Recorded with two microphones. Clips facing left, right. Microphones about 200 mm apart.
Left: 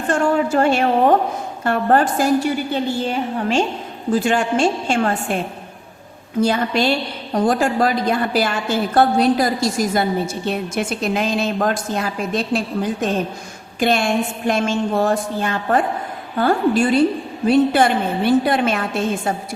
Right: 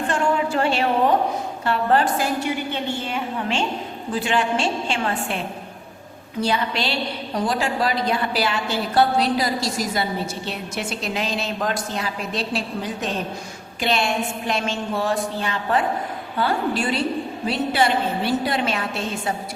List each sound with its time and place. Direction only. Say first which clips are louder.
0.1 s a woman's voice: left 6 dB; 45° left (ahead or behind)
6.4 s a woman's voice: left 6 dB; 50° left (ahead or behind)